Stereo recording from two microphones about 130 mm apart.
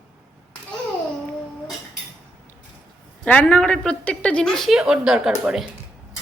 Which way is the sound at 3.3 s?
10° left (ahead or behind).